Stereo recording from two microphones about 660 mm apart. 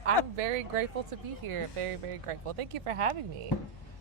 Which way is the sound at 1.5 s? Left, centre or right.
Right.